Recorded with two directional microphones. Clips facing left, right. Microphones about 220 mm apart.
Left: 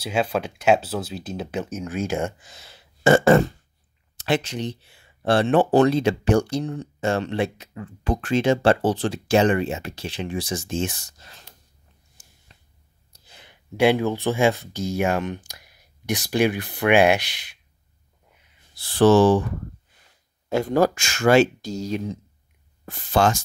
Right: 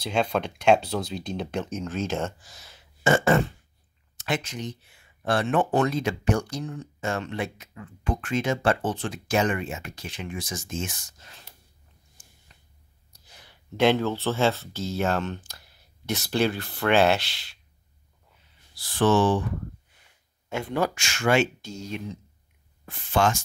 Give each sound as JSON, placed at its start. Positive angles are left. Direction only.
{"t": 0.0, "sound": "speech", "side_deg": 5}
{"t": 2.4, "sound": "burping", "side_deg": 25}
{"t": 4.2, "sound": "speech", "side_deg": 30}
{"t": 12.2, "sound": "a sound", "side_deg": 40}
{"t": 13.1, "sound": "a sound", "side_deg": 25}
{"t": 13.7, "sound": "speech", "side_deg": 10}
{"t": 18.8, "sound": "speech", "side_deg": 35}
{"t": 20.4, "sound": "speech", "side_deg": 40}